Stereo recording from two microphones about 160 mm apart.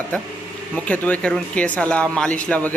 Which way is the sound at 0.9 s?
10° left (ahead or behind).